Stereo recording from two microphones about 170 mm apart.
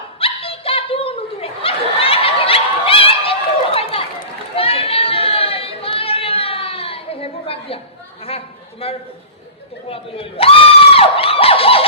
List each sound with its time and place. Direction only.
0.2 s chuckle: 35° left (ahead or behind)
4.5 s chatter: 35° left (ahead or behind)
8.8 s a sound: 35° left (ahead or behind)